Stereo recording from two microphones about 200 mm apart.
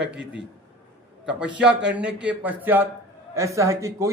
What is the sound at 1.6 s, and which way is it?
A man's voice, 5° right (ahead or behind).